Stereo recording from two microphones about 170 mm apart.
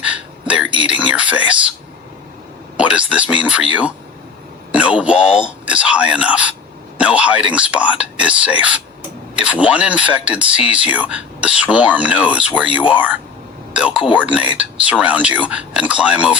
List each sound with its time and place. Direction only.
0.0 s a sound: 10° right (ahead or behind)
0.9 s speech: 5° right (ahead or behind)
2.7 s speech: 5° right (ahead or behind)